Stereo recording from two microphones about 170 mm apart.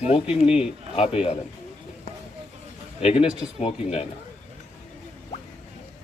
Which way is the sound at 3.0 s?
35° left (ahead or behind).